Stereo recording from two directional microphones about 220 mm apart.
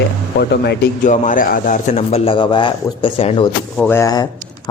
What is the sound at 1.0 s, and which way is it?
Speech, 35° left (ahead or behind).